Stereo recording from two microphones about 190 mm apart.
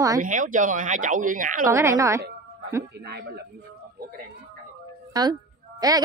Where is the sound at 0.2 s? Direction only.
45° right (ahead or behind).